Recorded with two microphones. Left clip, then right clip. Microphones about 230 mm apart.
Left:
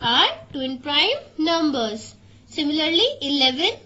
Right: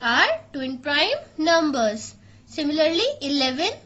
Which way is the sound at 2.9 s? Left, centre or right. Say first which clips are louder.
Left 3 dB; right.